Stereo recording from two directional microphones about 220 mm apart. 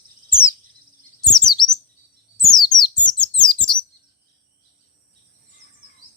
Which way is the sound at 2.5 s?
20° left (ahead or behind).